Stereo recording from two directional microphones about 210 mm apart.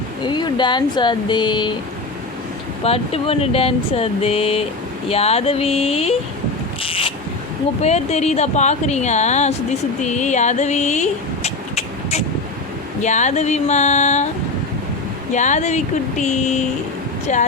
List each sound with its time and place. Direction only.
0.3 s speech: 20° left (ahead or behind)
2.8 s speech: 25° left (ahead or behind)
6.8 s a sound: 25° left (ahead or behind)
7.8 s speech: 30° left (ahead or behind)
15.3 s speech: 35° left (ahead or behind)